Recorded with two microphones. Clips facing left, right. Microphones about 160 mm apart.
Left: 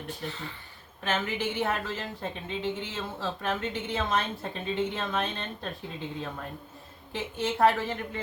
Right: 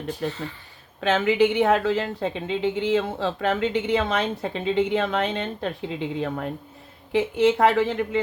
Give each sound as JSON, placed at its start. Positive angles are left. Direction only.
{"t": 0.2, "sound": "a woman's voice", "side_deg": -90}